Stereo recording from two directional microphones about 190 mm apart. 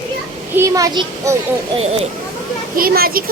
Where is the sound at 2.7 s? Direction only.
50° right (ahead or behind).